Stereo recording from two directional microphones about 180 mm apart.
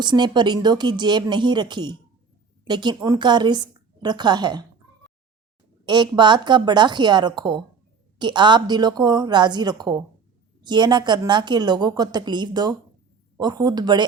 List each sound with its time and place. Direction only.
0.0 s a woman's voice: 25° right (ahead or behind)
5.8 s a woman's voice: 25° right (ahead or behind)